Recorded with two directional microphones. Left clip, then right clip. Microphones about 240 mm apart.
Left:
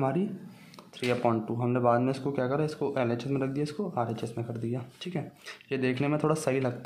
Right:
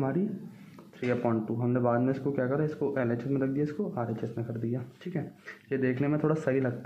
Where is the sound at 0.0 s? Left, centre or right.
Left.